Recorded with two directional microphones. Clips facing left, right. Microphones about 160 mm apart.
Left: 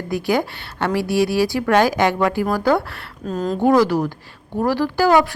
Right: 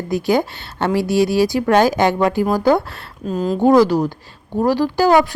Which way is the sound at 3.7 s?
15° right (ahead or behind).